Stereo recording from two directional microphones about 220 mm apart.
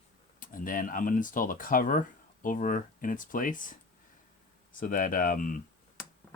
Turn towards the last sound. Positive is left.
turn(degrees=40)  # may be behind; listen again after turning